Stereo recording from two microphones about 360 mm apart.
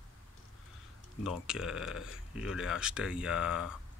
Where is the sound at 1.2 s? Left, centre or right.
Centre.